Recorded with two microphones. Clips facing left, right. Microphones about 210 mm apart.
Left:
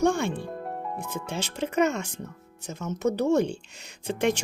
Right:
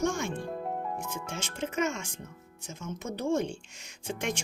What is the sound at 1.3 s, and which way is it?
Speech, 35° left (ahead or behind).